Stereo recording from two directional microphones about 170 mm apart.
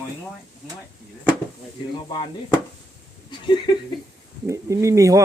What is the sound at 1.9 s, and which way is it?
Chop, 25° left (ahead or behind).